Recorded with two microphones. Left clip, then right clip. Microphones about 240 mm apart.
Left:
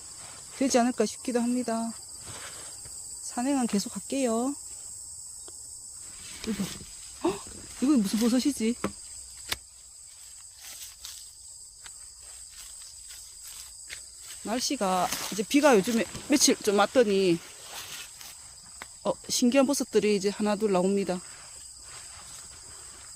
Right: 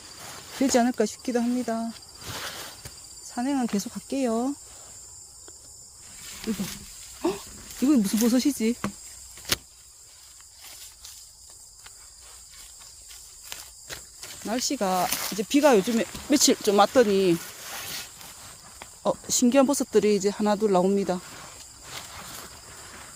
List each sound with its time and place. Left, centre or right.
0.6 s speech: centre
2.3 s insect: right
3.2 s speech: centre
7.2 s speech: centre
10.6 s walk: centre
14.4 s speech: centre
19.0 s speech: centre